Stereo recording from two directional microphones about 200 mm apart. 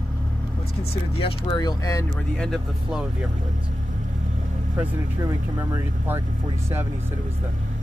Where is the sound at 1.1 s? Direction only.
25° left (ahead or behind).